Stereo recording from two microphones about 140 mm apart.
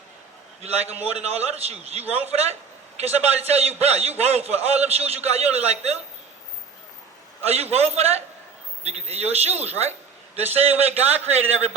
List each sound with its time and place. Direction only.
0.6 s a man's voice: 50° right (ahead or behind)
7.4 s a man's voice: 45° right (ahead or behind)